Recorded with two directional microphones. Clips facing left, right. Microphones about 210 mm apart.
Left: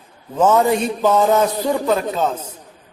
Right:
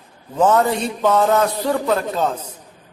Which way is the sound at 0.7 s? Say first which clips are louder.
Left 2 dB; 10° left (ahead or behind).